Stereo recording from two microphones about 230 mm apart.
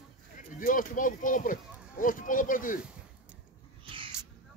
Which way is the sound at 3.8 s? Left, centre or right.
Right.